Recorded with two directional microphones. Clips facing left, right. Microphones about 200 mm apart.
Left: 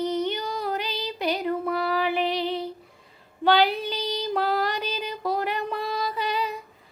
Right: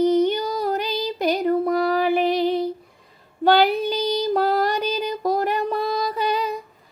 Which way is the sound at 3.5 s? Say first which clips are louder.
Right 4 dB; 45° right (ahead or behind).